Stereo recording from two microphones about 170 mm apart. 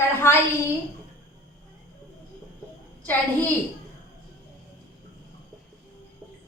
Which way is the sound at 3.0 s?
10° left (ahead or behind).